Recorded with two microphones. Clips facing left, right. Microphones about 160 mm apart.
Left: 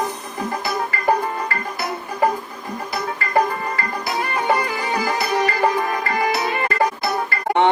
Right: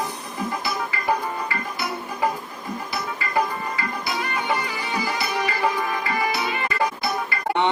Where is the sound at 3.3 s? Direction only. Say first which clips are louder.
Left 5 dB; 45° left (ahead or behind).